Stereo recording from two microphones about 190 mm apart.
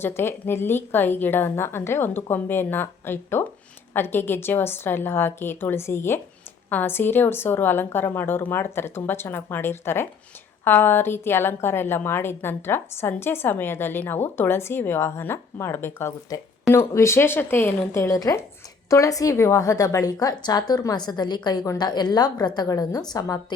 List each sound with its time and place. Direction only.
0.0 s a woman's voice: 10° left (ahead or behind)